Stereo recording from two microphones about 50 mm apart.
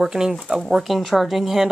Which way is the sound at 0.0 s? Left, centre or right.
Centre.